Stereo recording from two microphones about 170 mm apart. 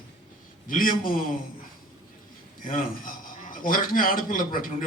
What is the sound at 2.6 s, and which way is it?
Speech, 50° left (ahead or behind).